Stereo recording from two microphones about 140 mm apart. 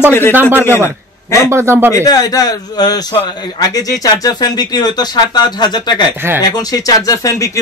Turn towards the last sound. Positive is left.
turn(degrees=20)  # may be behind; listen again after turning